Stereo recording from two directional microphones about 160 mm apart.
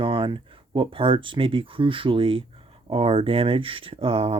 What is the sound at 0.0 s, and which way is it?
Speech, 30° right (ahead or behind).